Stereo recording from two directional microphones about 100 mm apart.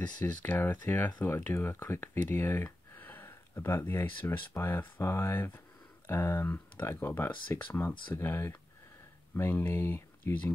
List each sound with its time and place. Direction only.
0.3 s speech: 15° left (ahead or behind)